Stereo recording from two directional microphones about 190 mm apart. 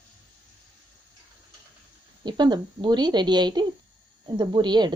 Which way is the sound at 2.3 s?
25° right (ahead or behind).